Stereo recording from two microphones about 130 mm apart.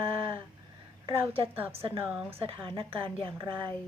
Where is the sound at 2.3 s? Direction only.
45° right (ahead or behind).